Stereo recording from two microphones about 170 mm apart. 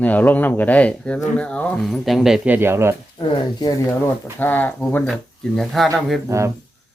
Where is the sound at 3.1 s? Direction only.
30° left (ahead or behind).